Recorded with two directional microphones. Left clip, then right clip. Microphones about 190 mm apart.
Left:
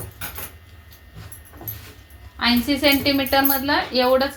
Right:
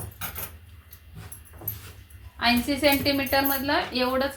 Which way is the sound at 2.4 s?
30° left (ahead or behind).